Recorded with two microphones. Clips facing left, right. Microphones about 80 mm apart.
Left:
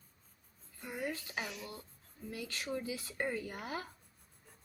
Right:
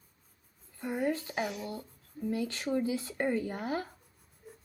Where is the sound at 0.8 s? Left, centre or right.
Right.